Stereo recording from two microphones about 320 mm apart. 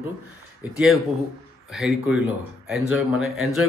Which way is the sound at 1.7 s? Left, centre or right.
Centre.